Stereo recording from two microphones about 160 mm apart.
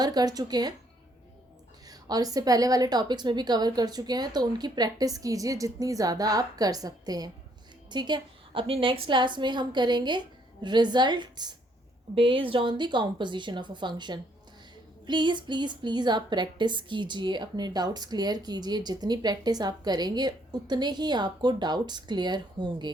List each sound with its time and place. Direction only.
0.0 s a woman's voice: 25° right (ahead or behind)
1.9 s a woman's voice: 25° right (ahead or behind)